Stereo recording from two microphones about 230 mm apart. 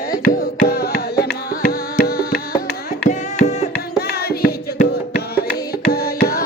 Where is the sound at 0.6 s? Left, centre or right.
Left.